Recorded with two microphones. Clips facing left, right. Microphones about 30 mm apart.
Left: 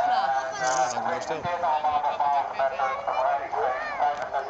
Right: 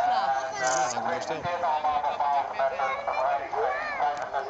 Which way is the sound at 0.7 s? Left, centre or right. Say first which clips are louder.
Left 2 dB; left.